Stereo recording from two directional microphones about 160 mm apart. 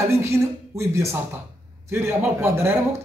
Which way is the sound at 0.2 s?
15° right (ahead or behind).